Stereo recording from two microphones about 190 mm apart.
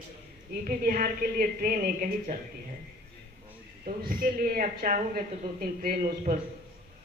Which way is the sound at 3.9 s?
50° right (ahead or behind).